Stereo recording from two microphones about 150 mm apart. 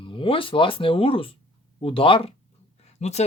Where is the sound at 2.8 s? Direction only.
45° left (ahead or behind).